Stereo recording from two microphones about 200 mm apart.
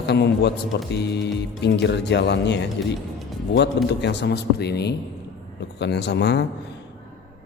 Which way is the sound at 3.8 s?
60° left (ahead or behind).